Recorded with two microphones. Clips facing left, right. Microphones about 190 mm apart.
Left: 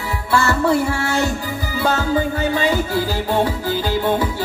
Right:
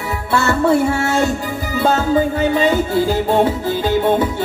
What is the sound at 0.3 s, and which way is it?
Music, 25° right (ahead or behind).